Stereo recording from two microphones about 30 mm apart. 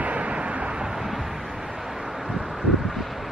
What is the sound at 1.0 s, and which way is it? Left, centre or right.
Wind, centre.